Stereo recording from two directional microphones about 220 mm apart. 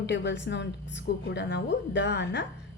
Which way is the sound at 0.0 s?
50° left (ahead or behind).